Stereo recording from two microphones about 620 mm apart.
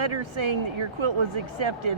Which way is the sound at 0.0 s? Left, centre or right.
Right.